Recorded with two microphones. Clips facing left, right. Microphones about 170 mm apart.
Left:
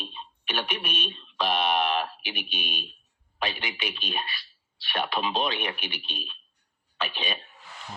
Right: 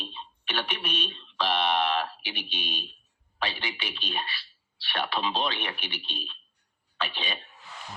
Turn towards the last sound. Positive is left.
turn(degrees=15)  # may be behind; listen again after turning